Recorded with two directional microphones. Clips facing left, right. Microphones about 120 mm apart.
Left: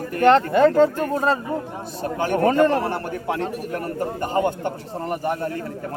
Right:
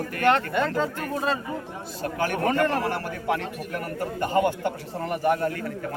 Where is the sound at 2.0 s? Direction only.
25° left (ahead or behind).